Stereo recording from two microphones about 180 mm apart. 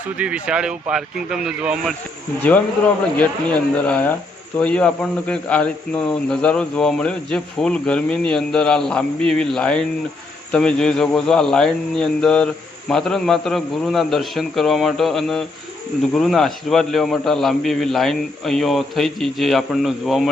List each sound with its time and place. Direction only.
0.2 s a man's voice: 5° right (ahead or behind)
3.2 s a man's voice: 10° left (ahead or behind)